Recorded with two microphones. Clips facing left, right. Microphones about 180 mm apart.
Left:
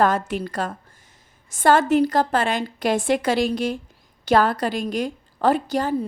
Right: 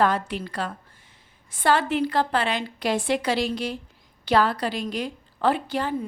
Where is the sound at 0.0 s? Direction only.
45° left (ahead or behind).